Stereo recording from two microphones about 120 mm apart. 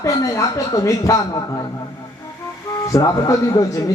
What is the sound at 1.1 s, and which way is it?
Speech, 30° left (ahead or behind).